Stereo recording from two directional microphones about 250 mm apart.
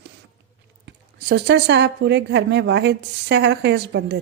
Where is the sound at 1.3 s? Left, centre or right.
Right.